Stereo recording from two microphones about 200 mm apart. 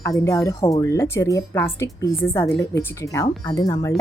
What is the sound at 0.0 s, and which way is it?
A woman's voice, 15° left (ahead or behind).